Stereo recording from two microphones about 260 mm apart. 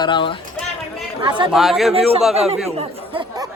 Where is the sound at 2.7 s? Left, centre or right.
Right.